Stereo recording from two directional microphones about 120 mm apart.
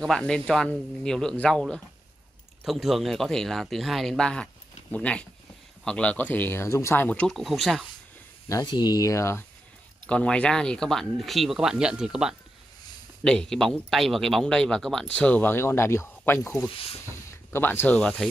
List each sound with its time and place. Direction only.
0.0 s speech: 5° left (ahead or behind)
8.5 s speech: 35° left (ahead or behind)
10.0 s speech: 10° left (ahead or behind)
13.2 s speech: 5° left (ahead or behind); by 16.5 s 20° left (ahead or behind)
16.6 s speech: 50° left (ahead or behind)
17.5 s speech: 15° left (ahead or behind)